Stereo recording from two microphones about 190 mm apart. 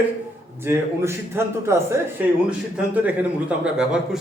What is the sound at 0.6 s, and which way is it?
A man's voice, 15° right (ahead or behind).